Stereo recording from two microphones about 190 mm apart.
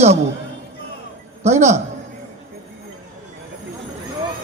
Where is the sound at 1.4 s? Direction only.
35° right (ahead or behind).